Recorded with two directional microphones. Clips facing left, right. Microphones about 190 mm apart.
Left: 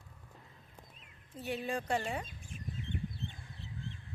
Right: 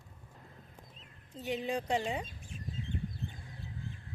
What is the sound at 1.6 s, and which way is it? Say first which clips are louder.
Speech: right 2 dB; 15° right (ahead or behind).